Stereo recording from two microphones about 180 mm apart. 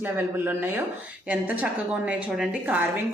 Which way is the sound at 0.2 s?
10° right (ahead or behind).